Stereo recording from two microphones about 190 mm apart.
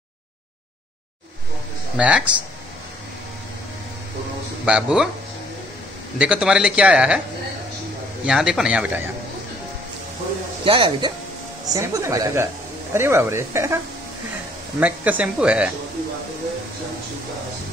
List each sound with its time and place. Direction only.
2.0 s speech: 5° right (ahead or behind)
4.6 s speech: 5° right (ahead or behind)
6.1 s speech: 5° right (ahead or behind)
8.3 s speech: 5° right (ahead or behind)
10.6 s speech: 25° right (ahead or behind)
14.8 s speech: 10° right (ahead or behind)